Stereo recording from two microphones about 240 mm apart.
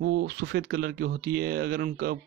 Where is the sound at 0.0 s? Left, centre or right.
Right.